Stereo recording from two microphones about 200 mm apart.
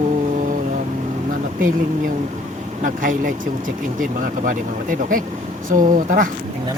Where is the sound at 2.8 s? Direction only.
40° right (ahead or behind).